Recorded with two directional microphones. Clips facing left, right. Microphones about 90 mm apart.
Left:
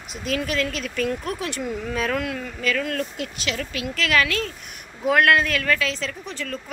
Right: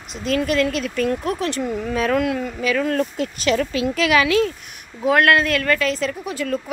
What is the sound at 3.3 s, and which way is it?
Speech, 40° right (ahead or behind).